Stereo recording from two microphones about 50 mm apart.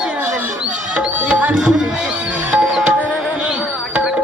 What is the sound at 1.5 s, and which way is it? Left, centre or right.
Speech, centre.